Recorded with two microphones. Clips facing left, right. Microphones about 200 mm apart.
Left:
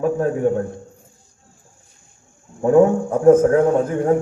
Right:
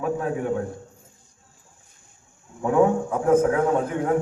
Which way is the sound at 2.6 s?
45° left (ahead or behind).